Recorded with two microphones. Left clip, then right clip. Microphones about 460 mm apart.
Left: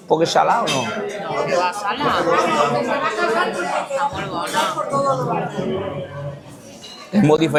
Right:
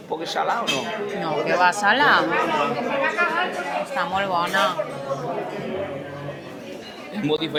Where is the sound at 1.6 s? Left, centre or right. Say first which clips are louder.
Right 3 dB; right.